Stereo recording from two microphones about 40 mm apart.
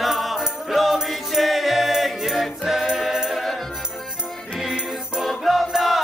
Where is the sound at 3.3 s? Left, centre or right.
Centre.